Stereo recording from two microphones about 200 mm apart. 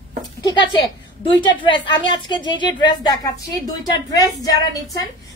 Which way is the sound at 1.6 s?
25° left (ahead or behind).